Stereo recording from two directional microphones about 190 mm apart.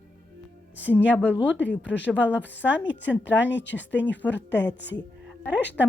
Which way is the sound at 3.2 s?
70° left (ahead or behind).